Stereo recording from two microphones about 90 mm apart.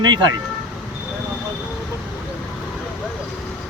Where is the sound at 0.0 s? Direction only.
55° right (ahead or behind).